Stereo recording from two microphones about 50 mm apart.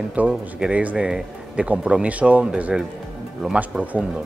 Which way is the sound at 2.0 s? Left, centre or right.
Right.